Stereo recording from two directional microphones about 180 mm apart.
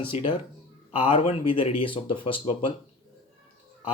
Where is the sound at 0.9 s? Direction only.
30° left (ahead or behind).